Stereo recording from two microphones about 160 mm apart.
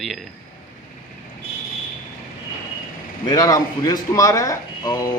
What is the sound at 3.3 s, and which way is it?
A man's voice, 25° left (ahead or behind).